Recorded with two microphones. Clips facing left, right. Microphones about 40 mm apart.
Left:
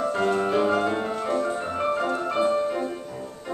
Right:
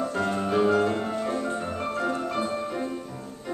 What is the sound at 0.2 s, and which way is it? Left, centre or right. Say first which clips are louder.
Music: left 5 dB; left.